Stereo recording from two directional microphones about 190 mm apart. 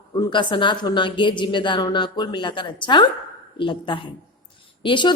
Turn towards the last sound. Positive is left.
turn(degrees=25)  # may be behind; listen again after turning